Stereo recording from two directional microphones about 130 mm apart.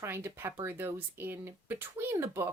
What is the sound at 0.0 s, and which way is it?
Speech, 20° right (ahead or behind).